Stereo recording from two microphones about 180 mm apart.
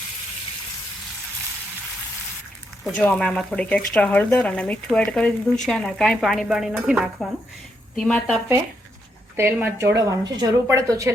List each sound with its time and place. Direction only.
2.8 s speech: 5° left (ahead or behind)
9.3 s speech: 10° right (ahead or behind)